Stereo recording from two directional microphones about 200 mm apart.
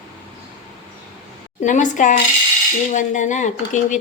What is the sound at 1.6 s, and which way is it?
Speech, 40° left (ahead or behind).